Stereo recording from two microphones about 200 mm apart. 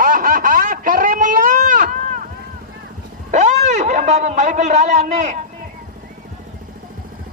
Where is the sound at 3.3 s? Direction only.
35° right (ahead or behind).